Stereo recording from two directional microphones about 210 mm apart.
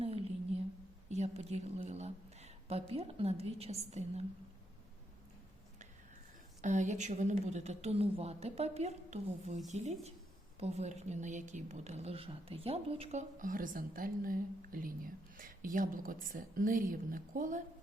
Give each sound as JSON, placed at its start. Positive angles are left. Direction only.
{"t": 0.0, "sound": "a sound", "side_deg": -30}
{"t": 1.1, "sound": "a woman's voice", "side_deg": -30}
{"t": 6.6, "sound": "speech", "side_deg": -35}